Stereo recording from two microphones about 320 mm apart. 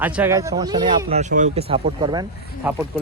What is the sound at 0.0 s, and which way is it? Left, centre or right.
Speech, centre.